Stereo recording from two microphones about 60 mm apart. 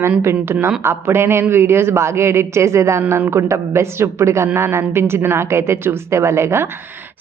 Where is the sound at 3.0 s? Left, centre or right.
Right.